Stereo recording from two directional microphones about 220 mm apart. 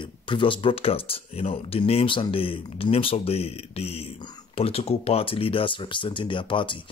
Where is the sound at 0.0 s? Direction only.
20° left (ahead or behind).